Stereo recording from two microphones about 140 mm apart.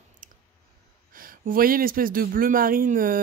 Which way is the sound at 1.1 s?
90° right.